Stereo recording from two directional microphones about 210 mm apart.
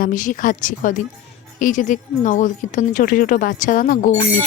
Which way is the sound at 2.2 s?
35° left (ahead or behind).